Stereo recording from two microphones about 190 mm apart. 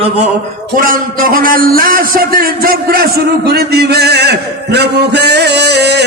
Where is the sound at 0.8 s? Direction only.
50° right (ahead or behind).